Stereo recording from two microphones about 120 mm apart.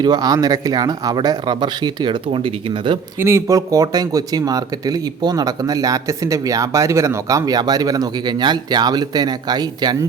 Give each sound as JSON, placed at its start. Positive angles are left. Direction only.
{"t": 0.0, "sound": "speech", "side_deg": -35}
{"t": 3.2, "sound": "speech", "side_deg": -20}